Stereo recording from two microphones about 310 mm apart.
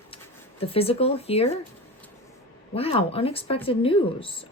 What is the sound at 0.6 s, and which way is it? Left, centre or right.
Speech, centre.